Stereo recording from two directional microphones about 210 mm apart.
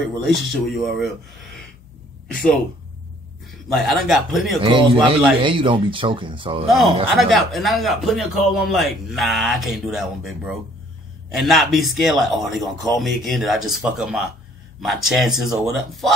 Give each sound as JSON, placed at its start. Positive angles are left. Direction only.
{"t": 0.0, "sound": "speech", "side_deg": 0}
{"t": 3.6, "sound": "speech", "side_deg": 0}
{"t": 4.6, "sound": "speech", "side_deg": -25}
{"t": 7.2, "sound": "speech", "side_deg": 0}